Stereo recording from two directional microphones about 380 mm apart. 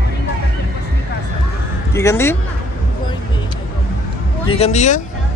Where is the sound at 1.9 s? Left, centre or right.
Centre.